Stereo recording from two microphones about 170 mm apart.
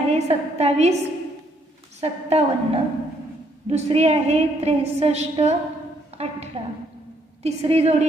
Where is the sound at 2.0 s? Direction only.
35° right (ahead or behind).